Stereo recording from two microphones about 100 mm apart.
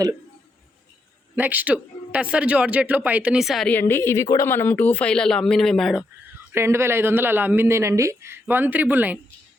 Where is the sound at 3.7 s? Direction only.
20° left (ahead or behind); by 6.0 s centre (ahead or behind).